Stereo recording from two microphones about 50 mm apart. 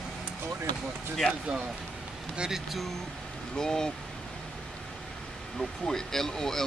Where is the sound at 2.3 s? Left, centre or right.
Centre.